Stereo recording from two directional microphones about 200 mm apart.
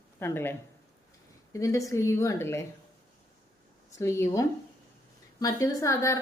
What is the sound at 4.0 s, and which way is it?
Speech, 15° left (ahead or behind).